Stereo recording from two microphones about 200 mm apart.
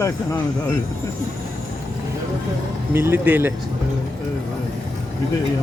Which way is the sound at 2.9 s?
10° right (ahead or behind).